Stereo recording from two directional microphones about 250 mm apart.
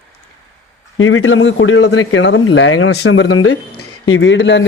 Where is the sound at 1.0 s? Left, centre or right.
Left.